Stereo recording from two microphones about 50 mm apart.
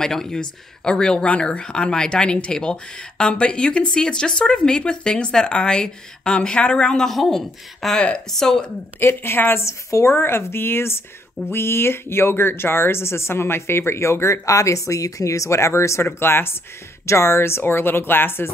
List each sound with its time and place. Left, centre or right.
0.0 s speech: centre
1.3 s speech: left
1.6 s speech: centre
9.0 s speech: left
9.7 s speech: left
10.1 s speech: left
16.2 s speech: left
17.0 s speech: left